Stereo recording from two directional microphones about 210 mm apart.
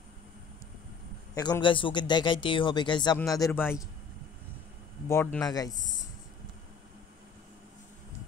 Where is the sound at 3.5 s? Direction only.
10° left (ahead or behind).